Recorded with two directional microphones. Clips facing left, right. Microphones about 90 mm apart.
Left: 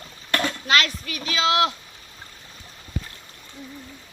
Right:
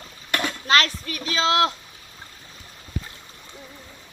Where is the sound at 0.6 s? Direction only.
35° right (ahead or behind).